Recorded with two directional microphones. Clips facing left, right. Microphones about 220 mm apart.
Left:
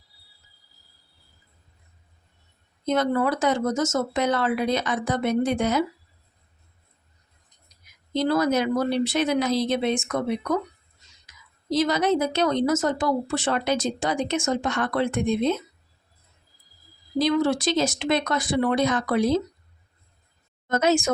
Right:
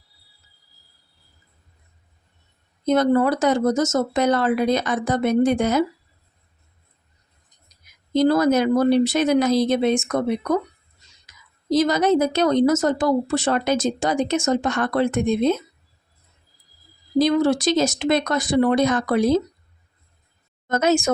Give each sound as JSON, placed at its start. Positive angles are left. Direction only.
{"t": 2.8, "sound": "speech", "side_deg": -45}
{"t": 8.1, "sound": "speech", "side_deg": -45}
{"t": 11.7, "sound": "speech", "side_deg": -45}
{"t": 17.2, "sound": "speech", "side_deg": -40}
{"t": 20.7, "sound": "speech", "side_deg": -45}